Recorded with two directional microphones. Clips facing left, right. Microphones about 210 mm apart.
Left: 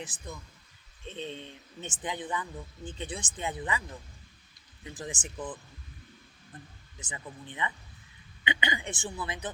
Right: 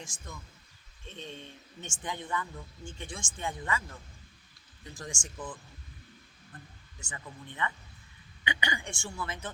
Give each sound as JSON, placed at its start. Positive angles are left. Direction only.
{"t": 0.0, "sound": "speech", "side_deg": 20}
{"t": 7.0, "sound": "speech", "side_deg": 20}